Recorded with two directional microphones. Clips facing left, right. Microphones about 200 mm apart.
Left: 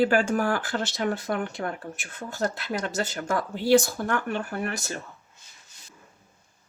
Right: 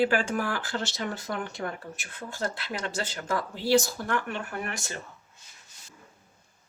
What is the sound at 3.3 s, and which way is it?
Speech, 55° left (ahead or behind).